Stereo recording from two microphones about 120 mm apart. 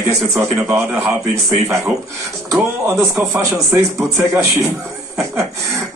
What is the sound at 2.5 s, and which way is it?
Speech, 20° right (ahead or behind).